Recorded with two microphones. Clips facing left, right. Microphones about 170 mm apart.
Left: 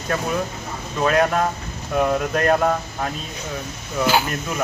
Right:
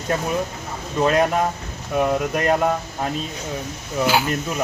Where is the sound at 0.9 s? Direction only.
20° right (ahead or behind).